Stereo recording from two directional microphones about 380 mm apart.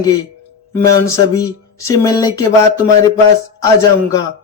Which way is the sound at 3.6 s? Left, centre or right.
Centre.